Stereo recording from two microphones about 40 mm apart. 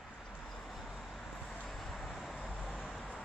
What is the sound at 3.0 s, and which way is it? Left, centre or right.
Vehicle, left.